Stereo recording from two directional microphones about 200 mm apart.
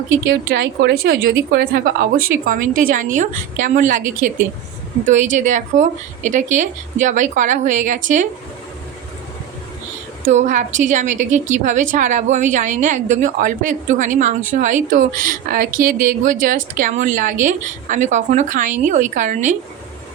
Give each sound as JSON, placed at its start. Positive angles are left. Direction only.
{"t": 0.3, "sound": "a woman's voice", "side_deg": -60}
{"t": 10.2, "sound": "speech", "side_deg": -40}